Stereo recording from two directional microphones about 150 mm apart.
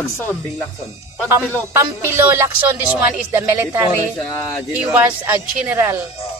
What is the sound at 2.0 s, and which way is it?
A woman's voice, 15° right (ahead or behind).